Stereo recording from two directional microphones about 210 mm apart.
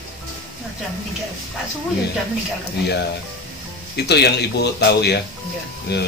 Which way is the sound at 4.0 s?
50° left (ahead or behind).